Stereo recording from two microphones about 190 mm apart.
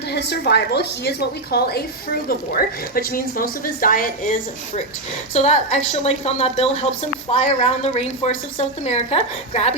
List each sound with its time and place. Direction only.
0.1 s a woman's voice: 60° left (ahead or behind)
5.3 s a woman's voice: 35° left (ahead or behind)